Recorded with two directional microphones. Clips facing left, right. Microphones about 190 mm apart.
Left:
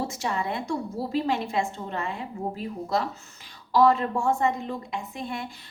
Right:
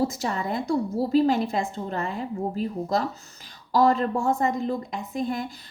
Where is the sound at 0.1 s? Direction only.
40° right (ahead or behind).